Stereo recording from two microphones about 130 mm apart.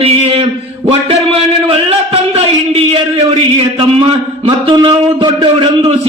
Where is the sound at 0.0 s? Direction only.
45° right (ahead or behind).